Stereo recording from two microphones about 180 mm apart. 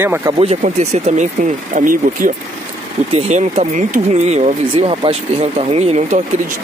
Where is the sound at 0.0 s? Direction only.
10° right (ahead or behind).